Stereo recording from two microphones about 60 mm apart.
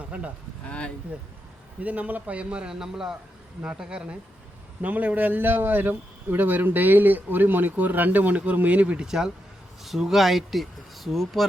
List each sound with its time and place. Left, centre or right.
1.8 s a man's voice: right
9.0 s speech: centre